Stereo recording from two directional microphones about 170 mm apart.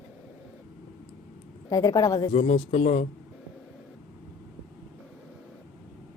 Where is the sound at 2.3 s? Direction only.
35° left (ahead or behind).